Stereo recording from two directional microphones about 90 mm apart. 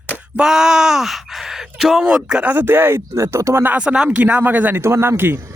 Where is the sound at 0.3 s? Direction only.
5° right (ahead or behind); by 5.4 s 25° right (ahead or behind).